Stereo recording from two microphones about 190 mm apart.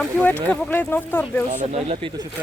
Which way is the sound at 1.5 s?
35° right (ahead or behind).